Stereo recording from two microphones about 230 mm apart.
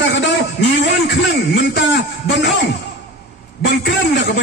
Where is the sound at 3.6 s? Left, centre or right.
Left.